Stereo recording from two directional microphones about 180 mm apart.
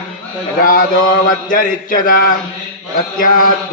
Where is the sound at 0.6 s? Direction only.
50° left (ahead or behind).